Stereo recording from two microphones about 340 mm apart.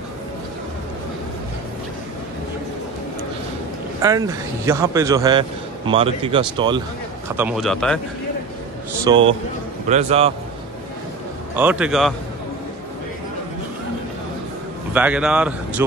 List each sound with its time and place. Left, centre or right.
4.0 s a man's voice: centre
9.0 s a man's voice: centre
11.5 s speech: centre
15.0 s speech: centre